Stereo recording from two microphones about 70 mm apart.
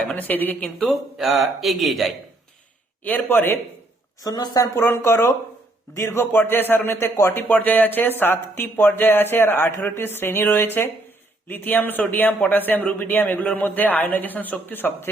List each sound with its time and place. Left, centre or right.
0.0 s a man's voice: left
0.8 s speech: centre
3.0 s a man's voice: left
4.2 s speech: left
4.8 s a man's voice: left